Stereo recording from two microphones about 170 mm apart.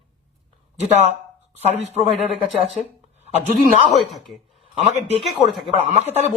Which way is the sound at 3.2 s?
40° right (ahead or behind).